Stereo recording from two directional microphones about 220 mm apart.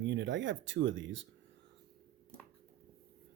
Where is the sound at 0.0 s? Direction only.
55° right (ahead or behind).